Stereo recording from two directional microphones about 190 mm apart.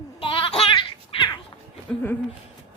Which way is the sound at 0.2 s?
30° left (ahead or behind).